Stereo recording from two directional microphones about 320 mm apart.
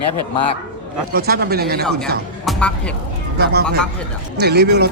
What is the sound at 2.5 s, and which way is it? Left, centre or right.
Speech, centre.